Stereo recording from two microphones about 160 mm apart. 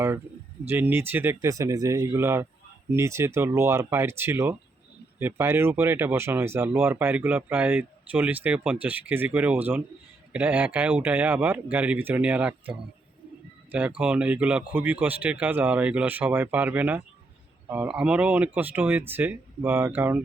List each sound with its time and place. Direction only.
0.7 s speech: 15° right (ahead or behind)